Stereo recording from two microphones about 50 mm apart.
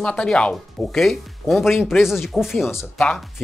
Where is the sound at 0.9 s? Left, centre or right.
Centre.